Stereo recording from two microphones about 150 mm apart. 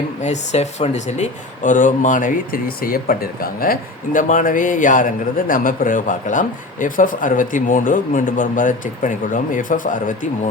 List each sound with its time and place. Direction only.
0.2 s speech: 50° left (ahead or behind)